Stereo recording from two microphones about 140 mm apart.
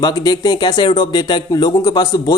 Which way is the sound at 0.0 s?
30° left (ahead or behind).